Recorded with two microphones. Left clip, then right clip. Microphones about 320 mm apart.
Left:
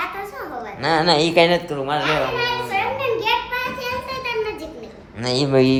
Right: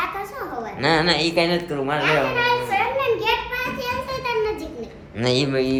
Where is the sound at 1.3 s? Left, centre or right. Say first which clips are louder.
Left 5 dB; left.